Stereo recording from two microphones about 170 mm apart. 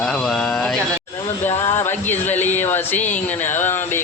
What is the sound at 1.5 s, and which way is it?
Speech, 15° left (ahead or behind).